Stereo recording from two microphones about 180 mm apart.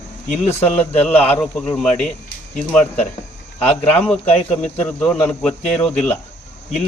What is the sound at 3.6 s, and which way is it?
Speech, 10° left (ahead or behind).